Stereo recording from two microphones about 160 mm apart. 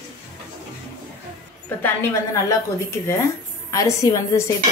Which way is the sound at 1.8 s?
20° left (ahead or behind).